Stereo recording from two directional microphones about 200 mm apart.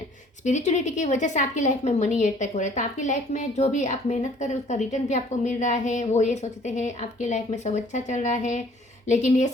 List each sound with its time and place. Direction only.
0.4 s a woman's voice: 35° left (ahead or behind)